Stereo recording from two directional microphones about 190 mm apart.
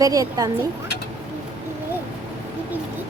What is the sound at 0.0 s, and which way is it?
Speech, 20° right (ahead or behind).